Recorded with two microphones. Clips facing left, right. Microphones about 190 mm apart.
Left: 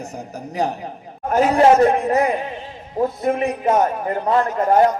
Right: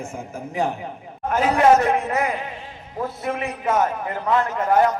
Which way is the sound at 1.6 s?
30° left (ahead or behind).